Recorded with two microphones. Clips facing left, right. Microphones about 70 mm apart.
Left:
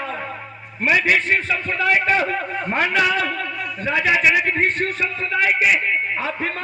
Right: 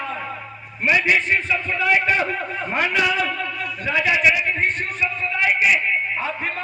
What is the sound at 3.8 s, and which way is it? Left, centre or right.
Speech, left.